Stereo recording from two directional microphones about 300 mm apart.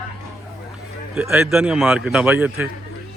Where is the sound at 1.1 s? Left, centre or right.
Centre.